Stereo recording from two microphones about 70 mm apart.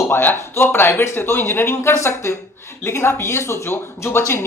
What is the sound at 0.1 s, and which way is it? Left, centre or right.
Speech, left.